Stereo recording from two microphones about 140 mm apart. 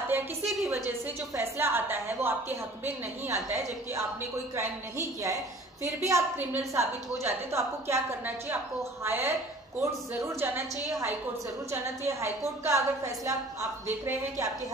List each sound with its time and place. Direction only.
0.8 s a woman's voice: 15° right (ahead or behind)
4.6 s a woman's voice: 20° right (ahead or behind)